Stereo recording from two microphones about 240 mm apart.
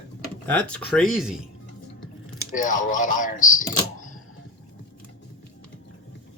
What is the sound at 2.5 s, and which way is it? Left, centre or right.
Speech, left.